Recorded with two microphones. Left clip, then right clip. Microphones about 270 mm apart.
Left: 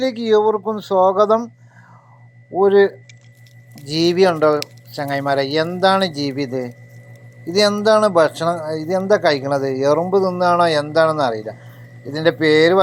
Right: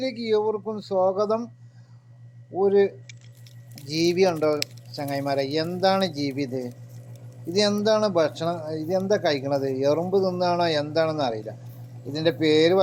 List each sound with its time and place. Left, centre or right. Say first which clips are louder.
0.0 s speech: left 8 dB; centre
2.6 s speech: left 7 dB; centre